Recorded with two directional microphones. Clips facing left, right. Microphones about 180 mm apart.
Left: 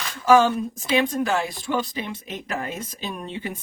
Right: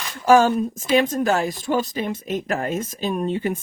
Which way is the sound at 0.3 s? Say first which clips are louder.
Right 2 dB; 45° right (ahead or behind).